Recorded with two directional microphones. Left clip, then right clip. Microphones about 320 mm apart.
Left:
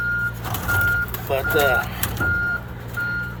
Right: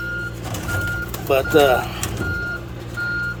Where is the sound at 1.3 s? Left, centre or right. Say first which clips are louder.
Right 5 dB; right.